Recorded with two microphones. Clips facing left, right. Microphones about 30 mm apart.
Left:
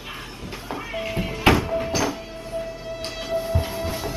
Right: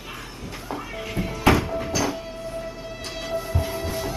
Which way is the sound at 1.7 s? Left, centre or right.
Centre.